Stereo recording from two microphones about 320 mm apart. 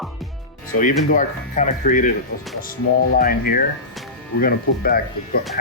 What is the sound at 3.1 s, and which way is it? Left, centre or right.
Speech, left.